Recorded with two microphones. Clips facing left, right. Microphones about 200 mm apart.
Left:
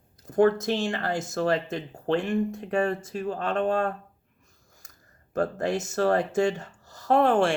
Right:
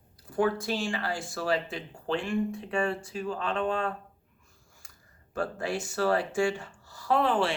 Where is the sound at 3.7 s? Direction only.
60° left (ahead or behind).